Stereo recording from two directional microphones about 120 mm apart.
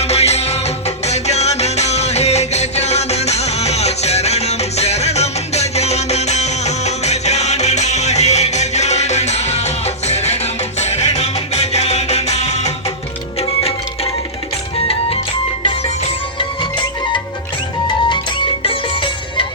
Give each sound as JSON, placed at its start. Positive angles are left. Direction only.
{"t": 0.0, "sound": "music", "side_deg": 60}
{"t": 16.4, "sound": "music", "side_deg": 40}